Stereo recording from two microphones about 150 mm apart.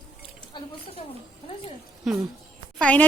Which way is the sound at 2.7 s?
10° left (ahead or behind).